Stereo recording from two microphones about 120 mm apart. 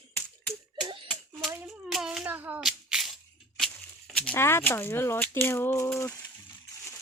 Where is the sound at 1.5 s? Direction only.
15° right (ahead or behind).